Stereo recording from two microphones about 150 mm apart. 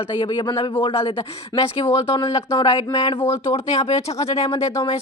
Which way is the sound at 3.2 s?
15° left (ahead or behind).